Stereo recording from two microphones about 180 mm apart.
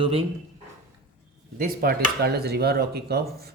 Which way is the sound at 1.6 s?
55° right (ahead or behind).